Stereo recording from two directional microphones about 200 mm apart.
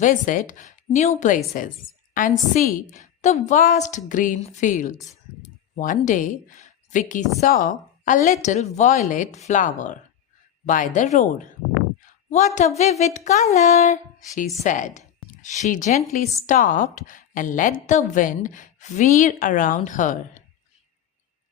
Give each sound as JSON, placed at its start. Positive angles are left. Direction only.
{"t": 0.0, "sound": "a woman's voice", "side_deg": 40}
{"t": 12.5, "sound": "a woman's voice", "side_deg": 35}